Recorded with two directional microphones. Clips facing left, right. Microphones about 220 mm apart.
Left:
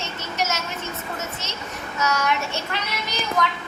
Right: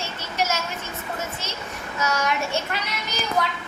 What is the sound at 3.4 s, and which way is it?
Speech, 30° right (ahead or behind).